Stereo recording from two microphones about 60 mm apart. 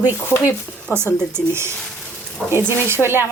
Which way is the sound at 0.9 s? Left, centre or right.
Right.